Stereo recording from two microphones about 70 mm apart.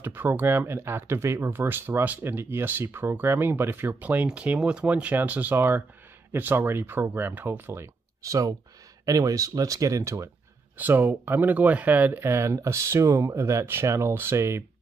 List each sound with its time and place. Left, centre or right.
0.0 s speech: right
4.3 s speech: centre; by 10.3 s right
10.8 s speech: right